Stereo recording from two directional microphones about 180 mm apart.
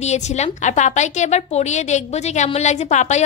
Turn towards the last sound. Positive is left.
turn(degrees=40)  # may be behind; listen again after turning